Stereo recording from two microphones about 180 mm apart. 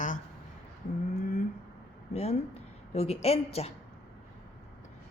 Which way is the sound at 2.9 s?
35° left (ahead or behind).